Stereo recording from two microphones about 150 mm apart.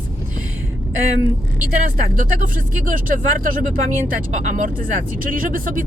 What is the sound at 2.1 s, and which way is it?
Speech, 65° right (ahead or behind).